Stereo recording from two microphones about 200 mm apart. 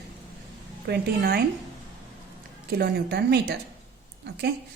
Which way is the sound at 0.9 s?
50° right (ahead or behind).